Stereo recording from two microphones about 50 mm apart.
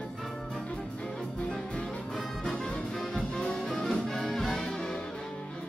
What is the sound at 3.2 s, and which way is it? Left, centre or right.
Music, centre.